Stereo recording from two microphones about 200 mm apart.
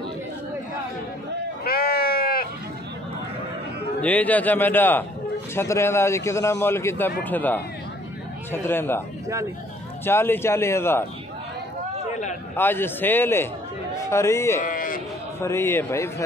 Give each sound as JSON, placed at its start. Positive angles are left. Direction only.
{"t": 1.6, "sound": "sheep", "side_deg": 50}
{"t": 4.0, "sound": "a man's voice", "side_deg": 5}
{"t": 10.0, "sound": "a man's voice", "side_deg": 10}
{"t": 12.5, "sound": "a man's voice", "side_deg": 10}
{"t": 14.6, "sound": "speech", "side_deg": 40}
{"t": 15.4, "sound": "a man's voice", "side_deg": 15}